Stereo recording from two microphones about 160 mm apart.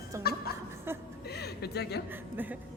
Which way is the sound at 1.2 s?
85° left.